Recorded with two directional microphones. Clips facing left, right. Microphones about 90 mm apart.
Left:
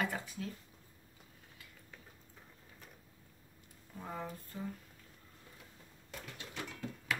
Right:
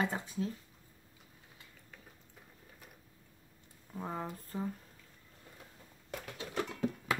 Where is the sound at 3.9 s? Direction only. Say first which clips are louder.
Right 3 dB; 30° right (ahead or behind).